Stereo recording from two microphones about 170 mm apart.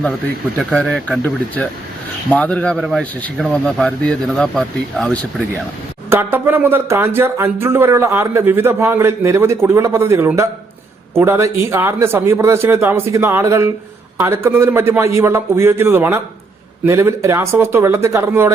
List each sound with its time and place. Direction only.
0.6 s speech: centre (ahead or behind)
6.1 s speech: 10° right (ahead or behind)